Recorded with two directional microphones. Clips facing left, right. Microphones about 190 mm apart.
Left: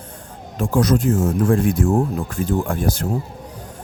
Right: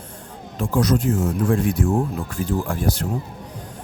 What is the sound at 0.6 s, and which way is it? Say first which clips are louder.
Speech: left 2 dB; 50° left (ahead or behind).